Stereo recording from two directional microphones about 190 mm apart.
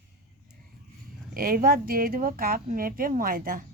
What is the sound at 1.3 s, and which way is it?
Speech, 50° right (ahead or behind).